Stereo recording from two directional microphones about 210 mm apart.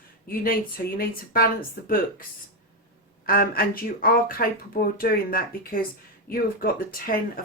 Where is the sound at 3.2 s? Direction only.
45° left (ahead or behind).